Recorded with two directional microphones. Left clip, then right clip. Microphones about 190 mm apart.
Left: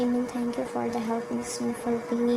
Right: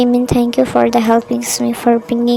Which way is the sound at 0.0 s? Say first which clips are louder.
Right 14 dB; 35° right (ahead or behind).